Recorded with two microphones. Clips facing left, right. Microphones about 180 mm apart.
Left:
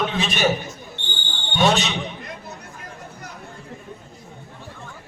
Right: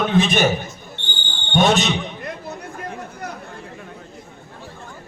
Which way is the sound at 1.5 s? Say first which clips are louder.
Right 3 dB; 50° right (ahead or behind).